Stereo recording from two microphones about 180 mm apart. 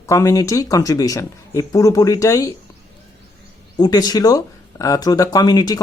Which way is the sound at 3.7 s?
20° left (ahead or behind).